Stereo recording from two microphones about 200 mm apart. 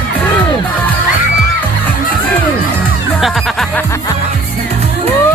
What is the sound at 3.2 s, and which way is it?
Music, centre (ahead or behind).